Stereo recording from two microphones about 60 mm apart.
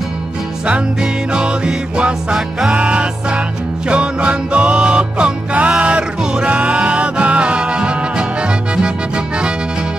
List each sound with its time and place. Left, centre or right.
1.3 s music: centre